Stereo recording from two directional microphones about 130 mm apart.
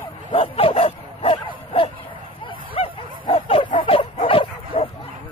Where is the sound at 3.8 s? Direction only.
45° left (ahead or behind).